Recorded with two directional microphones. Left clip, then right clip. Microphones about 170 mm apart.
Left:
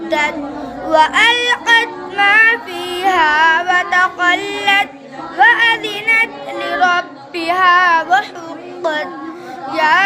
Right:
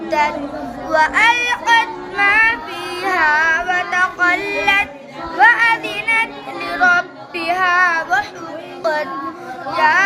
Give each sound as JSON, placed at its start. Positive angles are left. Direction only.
{"t": 0.9, "sound": "speech", "side_deg": 30}
{"t": 2.1, "sound": "child singing", "side_deg": 35}
{"t": 5.4, "sound": "music", "side_deg": 30}
{"t": 6.7, "sound": "singing", "side_deg": 30}
{"t": 7.3, "sound": "speech", "side_deg": 40}
{"t": 9.7, "sound": "speech", "side_deg": 40}